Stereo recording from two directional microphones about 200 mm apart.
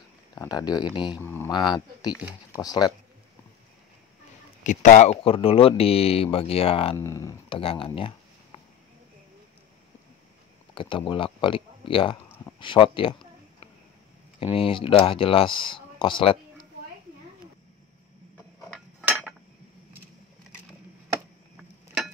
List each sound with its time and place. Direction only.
0.3 s speech: 20° left (ahead or behind)
1.2 s speech: 10° left (ahead or behind)
1.5 s speech: 20° left (ahead or behind)
4.6 s speech: 40° left (ahead or behind)
7.0 s speech: 15° left (ahead or behind)
7.4 s a sound: 25° left (ahead or behind)
10.7 s speech: 25° left (ahead or behind)
14.4 s speech: 25° left (ahead or behind)
19.0 s cutlery: 10° right (ahead or behind)
21.5 s a sound: centre (ahead or behind)